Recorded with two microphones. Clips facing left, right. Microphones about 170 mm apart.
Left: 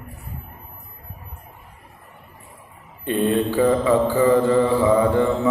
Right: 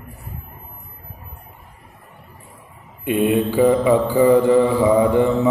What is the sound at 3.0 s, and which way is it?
Mantra, 10° right (ahead or behind).